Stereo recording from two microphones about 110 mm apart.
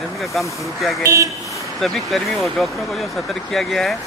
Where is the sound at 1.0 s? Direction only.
30° right (ahead or behind).